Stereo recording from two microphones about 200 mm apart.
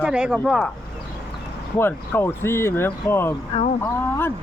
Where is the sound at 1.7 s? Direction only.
10° left (ahead or behind).